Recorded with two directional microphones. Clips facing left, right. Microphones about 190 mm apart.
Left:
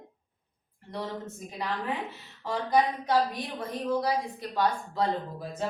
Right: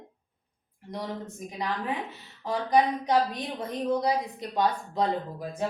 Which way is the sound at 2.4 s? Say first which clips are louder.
Right 2 dB; 15° right (ahead or behind).